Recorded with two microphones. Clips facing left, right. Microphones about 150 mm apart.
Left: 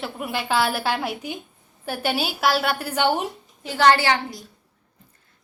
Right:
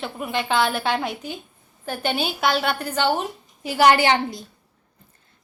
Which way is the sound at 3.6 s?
10° right (ahead or behind).